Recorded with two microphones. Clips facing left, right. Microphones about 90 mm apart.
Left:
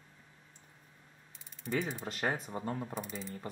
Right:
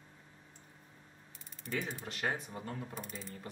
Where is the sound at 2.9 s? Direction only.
Centre (ahead or behind).